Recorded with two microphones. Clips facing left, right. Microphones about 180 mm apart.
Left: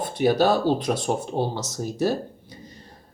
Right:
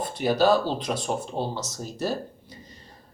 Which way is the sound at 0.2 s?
55° left (ahead or behind).